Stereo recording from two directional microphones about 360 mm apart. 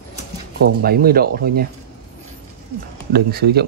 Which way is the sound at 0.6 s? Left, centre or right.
Right.